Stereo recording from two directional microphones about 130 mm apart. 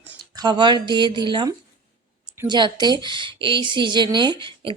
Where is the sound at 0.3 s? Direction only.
35° right (ahead or behind).